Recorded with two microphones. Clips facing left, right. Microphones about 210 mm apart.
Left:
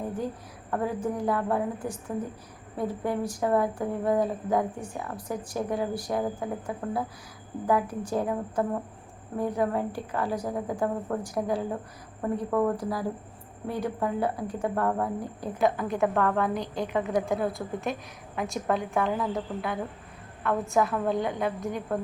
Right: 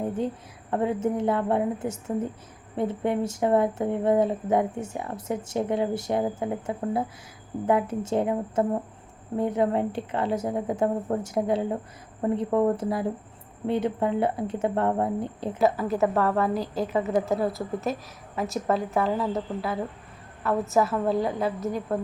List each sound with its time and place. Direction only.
0.7 s speech: 25° right (ahead or behind)
15.5 s a woman's voice: 5° right (ahead or behind)
20.4 s a woman's voice: 5° right (ahead or behind)